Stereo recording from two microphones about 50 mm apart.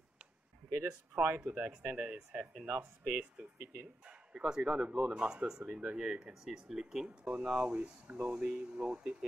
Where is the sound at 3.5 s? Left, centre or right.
Right.